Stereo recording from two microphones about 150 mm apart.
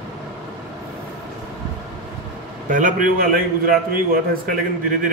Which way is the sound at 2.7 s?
60° right (ahead or behind).